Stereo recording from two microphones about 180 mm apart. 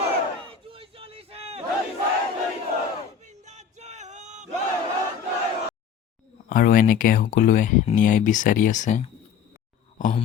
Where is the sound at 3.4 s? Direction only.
40° right (ahead or behind).